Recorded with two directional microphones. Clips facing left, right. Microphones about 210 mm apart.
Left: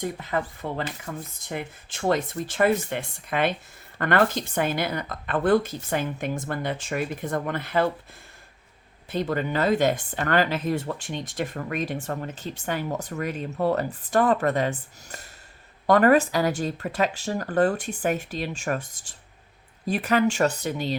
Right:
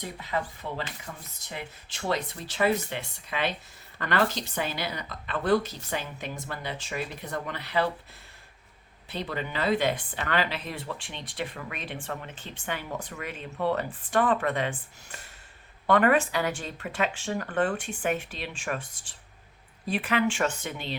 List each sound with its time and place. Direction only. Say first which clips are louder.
0.0 s speech: left 4 dB; 50° left (ahead or behind)
9.0 s speech: left 7 dB; 45° left (ahead or behind)